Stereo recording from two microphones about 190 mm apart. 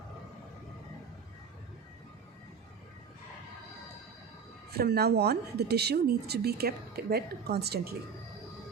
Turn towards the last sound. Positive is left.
turn(degrees=-60)  # may be behind; listen again after turning